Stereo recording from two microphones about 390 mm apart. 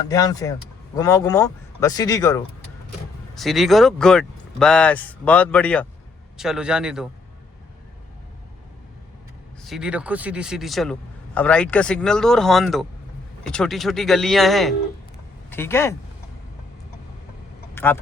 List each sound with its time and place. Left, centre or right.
0.1 s speech: centre
9.6 s speech: centre
17.8 s speech: centre